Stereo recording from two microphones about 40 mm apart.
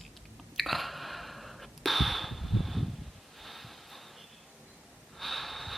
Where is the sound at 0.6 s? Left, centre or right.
Centre.